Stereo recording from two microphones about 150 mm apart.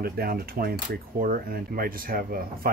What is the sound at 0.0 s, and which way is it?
Typewriter, 85° right.